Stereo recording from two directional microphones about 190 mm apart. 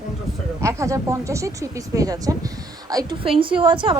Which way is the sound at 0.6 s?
15° right (ahead or behind).